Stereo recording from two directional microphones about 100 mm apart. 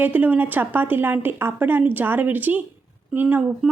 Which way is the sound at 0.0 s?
15° right (ahead or behind).